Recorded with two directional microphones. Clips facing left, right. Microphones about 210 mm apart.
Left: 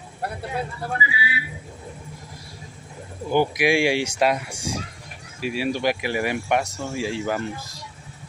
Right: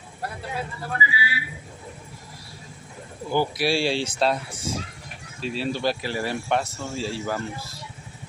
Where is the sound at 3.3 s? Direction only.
15° left (ahead or behind).